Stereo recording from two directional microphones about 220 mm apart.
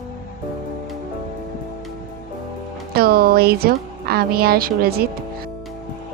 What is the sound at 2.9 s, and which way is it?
A woman's voice, 45° right (ahead or behind).